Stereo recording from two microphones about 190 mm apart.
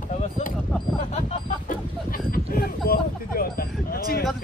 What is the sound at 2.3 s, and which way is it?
Speech, 50° left (ahead or behind).